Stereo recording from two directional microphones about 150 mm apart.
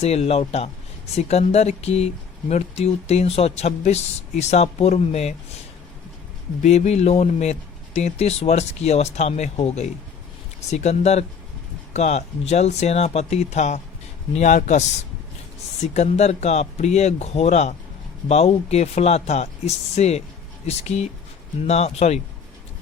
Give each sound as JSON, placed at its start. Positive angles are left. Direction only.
{"t": 0.0, "sound": "speech", "side_deg": 45}
{"t": 6.6, "sound": "speech", "side_deg": 50}